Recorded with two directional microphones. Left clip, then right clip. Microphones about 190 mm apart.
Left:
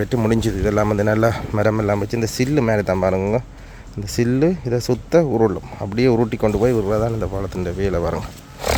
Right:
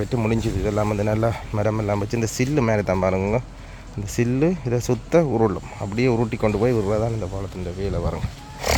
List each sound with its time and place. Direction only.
0.0 s speech: 15° left (ahead or behind)
7.2 s speech: 30° left (ahead or behind)
8.6 s music: 15° left (ahead or behind)